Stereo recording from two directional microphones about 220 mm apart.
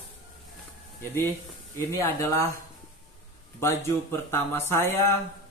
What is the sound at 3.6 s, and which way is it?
Speech, 10° left (ahead or behind).